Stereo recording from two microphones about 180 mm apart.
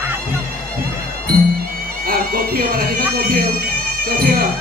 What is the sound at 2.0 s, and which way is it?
Speech, 55° right (ahead or behind).